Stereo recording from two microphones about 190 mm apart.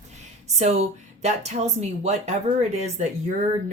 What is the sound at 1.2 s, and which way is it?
Speech, 35° right (ahead or behind).